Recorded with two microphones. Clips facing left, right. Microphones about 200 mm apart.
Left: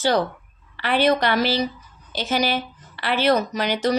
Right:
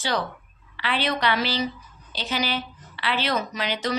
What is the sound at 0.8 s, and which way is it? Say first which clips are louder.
A woman's voice: left 7 dB; 45° left (ahead or behind).